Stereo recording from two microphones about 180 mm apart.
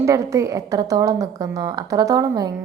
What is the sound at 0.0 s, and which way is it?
A woman's voice, 15° right (ahead or behind).